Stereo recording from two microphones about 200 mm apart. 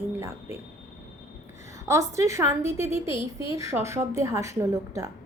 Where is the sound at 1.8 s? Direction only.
15° right (ahead or behind).